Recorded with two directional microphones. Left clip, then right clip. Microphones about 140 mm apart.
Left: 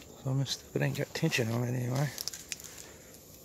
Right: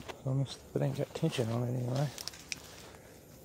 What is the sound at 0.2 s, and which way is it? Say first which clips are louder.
Speech: left 6 dB; 30° left (ahead or behind).